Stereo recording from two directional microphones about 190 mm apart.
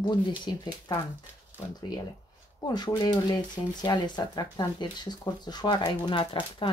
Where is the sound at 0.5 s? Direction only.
25° left (ahead or behind).